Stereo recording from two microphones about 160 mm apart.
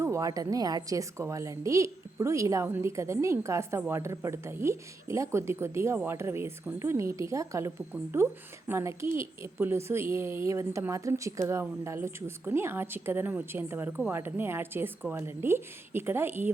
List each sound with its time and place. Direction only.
0.0 s a woman's voice: 20° right (ahead or behind)